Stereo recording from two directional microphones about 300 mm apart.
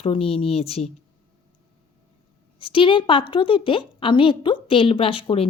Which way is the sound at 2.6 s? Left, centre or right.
Centre.